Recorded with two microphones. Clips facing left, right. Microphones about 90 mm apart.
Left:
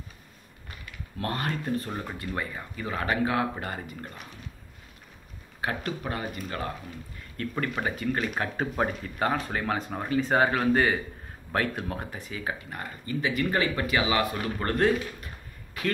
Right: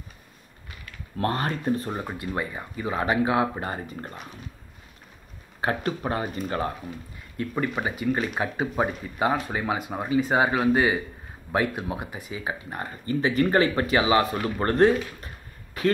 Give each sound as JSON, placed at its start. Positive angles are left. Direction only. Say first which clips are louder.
{"t": 1.1, "sound": "speech", "louder": "right 5 dB", "side_deg": -35}
{"t": 1.6, "sound": "speech", "louder": "right 4 dB", "side_deg": -20}
{"t": 5.6, "sound": "speech", "louder": "right 5 dB", "side_deg": -30}
{"t": 7.3, "sound": "speech", "louder": "right 3 dB", "side_deg": -10}